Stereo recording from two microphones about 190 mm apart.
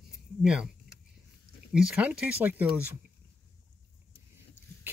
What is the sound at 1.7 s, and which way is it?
Speech, 5° right (ahead or behind).